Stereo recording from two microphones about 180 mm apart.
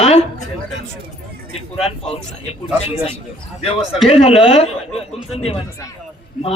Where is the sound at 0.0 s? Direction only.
35° left (ahead or behind).